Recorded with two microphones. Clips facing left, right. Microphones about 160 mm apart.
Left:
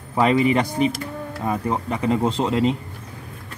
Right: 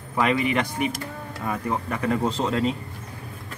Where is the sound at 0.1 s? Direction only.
30° left (ahead or behind).